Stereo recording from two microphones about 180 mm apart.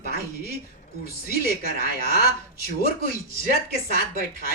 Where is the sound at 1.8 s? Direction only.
55° left (ahead or behind).